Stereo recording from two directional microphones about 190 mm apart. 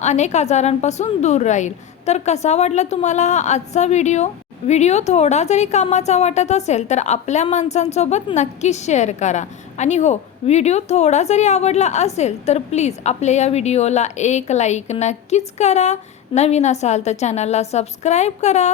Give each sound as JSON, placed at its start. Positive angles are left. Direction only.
{"t": 0.0, "sound": "a woman's voice", "side_deg": 35}